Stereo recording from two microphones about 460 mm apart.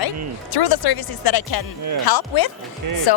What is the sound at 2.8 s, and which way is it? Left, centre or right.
Speech, right.